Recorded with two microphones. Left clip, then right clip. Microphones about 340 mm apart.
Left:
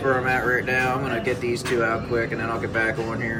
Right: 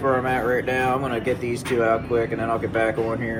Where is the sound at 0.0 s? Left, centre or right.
Centre.